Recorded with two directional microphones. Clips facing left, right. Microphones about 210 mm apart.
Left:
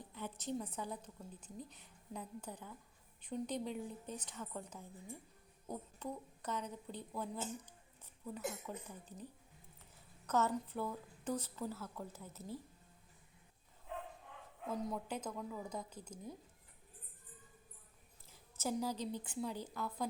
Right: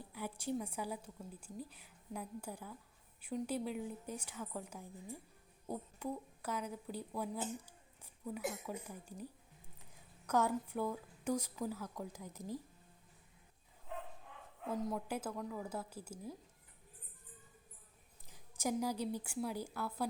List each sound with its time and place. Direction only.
0.0 s a woman's voice: 10° right (ahead or behind)
14.8 s a woman's voice: centre (ahead or behind)
18.3 s a woman's voice: 15° right (ahead or behind)